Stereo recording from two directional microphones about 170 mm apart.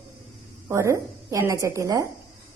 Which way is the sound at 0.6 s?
15° right (ahead or behind).